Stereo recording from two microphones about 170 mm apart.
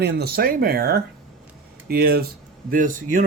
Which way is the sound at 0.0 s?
65° right (ahead or behind).